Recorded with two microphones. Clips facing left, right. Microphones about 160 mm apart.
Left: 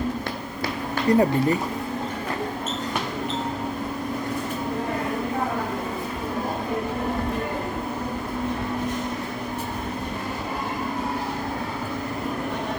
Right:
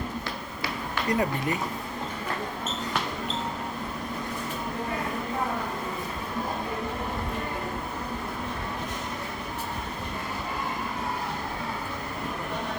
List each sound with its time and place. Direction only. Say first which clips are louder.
1.0 s speech: left 8 dB; 30° left (ahead or behind)